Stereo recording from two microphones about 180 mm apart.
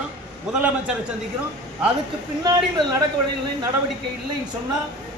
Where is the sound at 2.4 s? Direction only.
20° right (ahead or behind).